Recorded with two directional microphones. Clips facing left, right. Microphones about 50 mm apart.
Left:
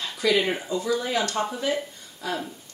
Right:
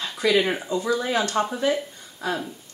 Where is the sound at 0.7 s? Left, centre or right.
Right.